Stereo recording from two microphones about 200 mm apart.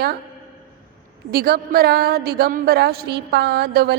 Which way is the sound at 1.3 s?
50° right (ahead or behind).